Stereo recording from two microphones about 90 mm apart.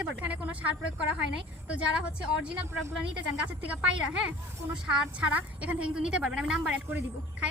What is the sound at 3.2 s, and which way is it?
A woman's voice, 15° right (ahead or behind).